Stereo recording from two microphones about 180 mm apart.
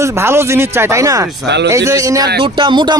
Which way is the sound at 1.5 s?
75° right (ahead or behind).